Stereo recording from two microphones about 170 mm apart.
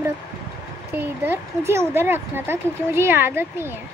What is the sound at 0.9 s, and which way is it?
Speech, 10° right (ahead or behind).